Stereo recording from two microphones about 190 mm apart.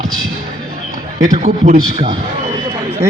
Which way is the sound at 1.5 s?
45° right (ahead or behind).